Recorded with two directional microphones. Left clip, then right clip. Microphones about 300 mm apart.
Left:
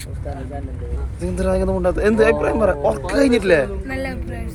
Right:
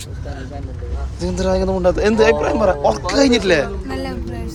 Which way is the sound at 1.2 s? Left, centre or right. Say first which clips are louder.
Right 2 dB; centre.